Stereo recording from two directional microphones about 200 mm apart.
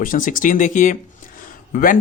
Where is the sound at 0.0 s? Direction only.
40° left (ahead or behind).